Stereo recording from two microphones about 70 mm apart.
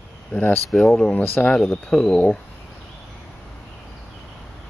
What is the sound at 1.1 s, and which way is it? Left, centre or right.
Speech, left.